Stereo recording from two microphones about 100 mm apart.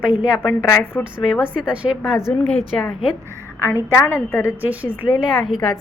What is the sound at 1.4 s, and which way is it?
Speech, 10° right (ahead or behind).